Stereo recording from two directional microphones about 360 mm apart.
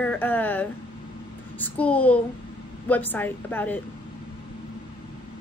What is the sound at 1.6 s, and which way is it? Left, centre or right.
A woman's voice, centre.